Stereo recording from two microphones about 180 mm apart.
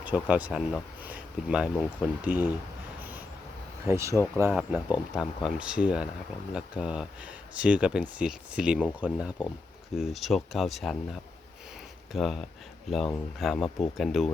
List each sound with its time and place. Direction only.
0.0 s speech: 10° right (ahead or behind)
3.8 s speech: 15° right (ahead or behind)
5.1 s speech: 5° right (ahead or behind)
12.1 s speech: centre (ahead or behind)